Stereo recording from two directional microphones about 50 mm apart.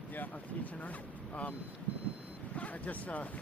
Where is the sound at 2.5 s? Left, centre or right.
Left.